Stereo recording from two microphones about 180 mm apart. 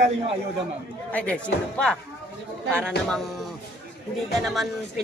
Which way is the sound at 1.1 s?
5° left (ahead or behind).